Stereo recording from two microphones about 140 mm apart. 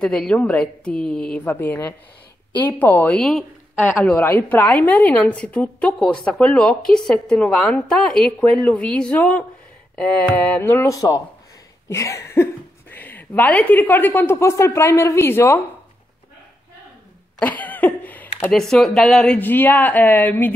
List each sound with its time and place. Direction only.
0.0 s a woman's voice: 5° left (ahead or behind)
11.9 s a sound: 20° left (ahead or behind)
12.9 s a woman's voice: 15° left (ahead or behind)
17.4 s speech: 10° left (ahead or behind)